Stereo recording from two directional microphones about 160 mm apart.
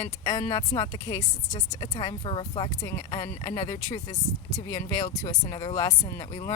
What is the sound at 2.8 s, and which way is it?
A woman's voice, 20° left (ahead or behind).